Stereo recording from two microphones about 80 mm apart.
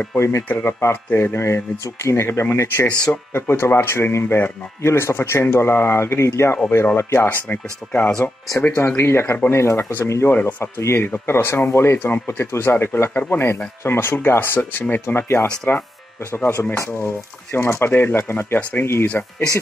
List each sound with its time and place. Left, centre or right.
0.1 s speech: left
7.2 s speech: centre
8.7 s speech: left